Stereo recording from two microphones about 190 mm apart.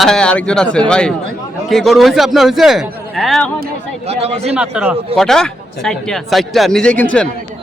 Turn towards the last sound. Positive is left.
turn(degrees=5)  # may be behind; listen again after turning